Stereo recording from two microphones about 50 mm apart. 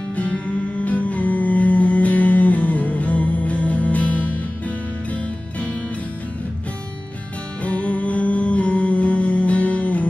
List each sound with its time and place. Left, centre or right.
0.7 s music: left
7.6 s music: left